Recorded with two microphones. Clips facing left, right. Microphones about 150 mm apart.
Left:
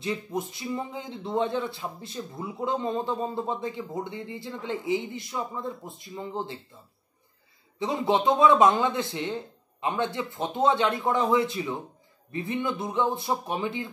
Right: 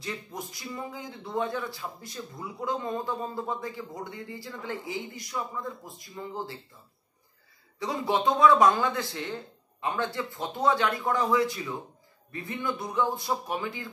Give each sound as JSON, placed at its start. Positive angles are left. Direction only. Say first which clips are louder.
{"t": 0.0, "sound": "a man's voice", "louder": "left 7 dB", "side_deg": 20}
{"t": 7.8, "sound": "a man's voice", "louder": "left 3 dB", "side_deg": 20}